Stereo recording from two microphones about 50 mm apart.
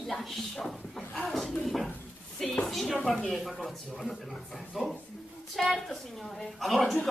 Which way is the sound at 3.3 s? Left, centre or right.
Centre.